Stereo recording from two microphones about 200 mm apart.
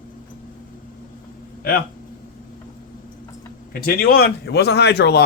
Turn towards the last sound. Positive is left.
turn(degrees=55)  # may be behind; listen again after turning